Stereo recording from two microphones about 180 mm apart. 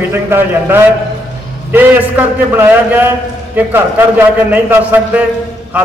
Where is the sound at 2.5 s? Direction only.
10° right (ahead or behind).